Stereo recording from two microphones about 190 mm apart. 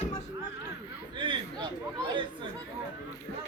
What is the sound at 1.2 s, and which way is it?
Speech, 25° right (ahead or behind).